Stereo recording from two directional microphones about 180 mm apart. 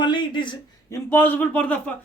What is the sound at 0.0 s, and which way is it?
Speech, 25° left (ahead or behind).